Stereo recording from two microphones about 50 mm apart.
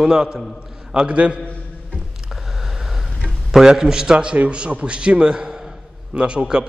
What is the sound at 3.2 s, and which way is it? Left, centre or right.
A man's voice, centre.